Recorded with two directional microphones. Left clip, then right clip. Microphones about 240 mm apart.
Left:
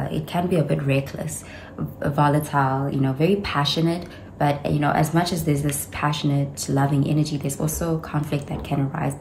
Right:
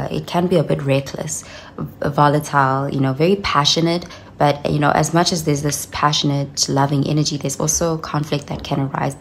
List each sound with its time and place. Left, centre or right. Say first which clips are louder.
0.0 s speech: right 5 dB; centre